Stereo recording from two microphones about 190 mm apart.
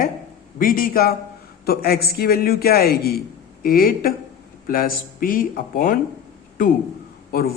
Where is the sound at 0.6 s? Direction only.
50° left (ahead or behind).